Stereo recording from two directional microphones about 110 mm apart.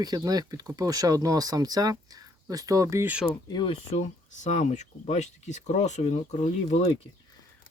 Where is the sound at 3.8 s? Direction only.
90° left.